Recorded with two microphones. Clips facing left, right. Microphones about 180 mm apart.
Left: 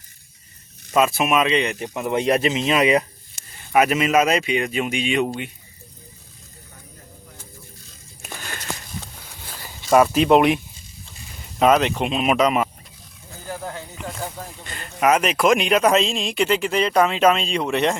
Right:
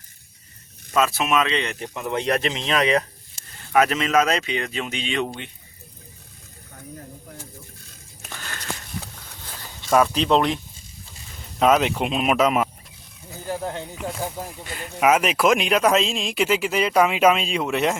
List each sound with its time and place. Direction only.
0.9 s speech: 15° left (ahead or behind)
8.2 s a sound: 15° left (ahead or behind)
9.6 s speech: 5° left (ahead or behind)
11.6 s speech: 5° right (ahead or behind)
13.5 s snake: 25° right (ahead or behind)
13.9 s snake: centre (ahead or behind)
14.3 s speech: 10° right (ahead or behind)